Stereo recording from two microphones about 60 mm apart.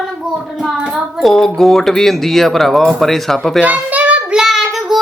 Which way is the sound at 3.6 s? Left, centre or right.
Right.